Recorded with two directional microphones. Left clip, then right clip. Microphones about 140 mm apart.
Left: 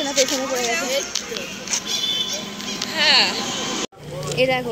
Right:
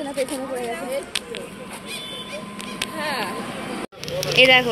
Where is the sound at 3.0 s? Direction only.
25° right (ahead or behind).